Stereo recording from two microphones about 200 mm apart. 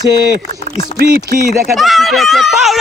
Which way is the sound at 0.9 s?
45° right (ahead or behind).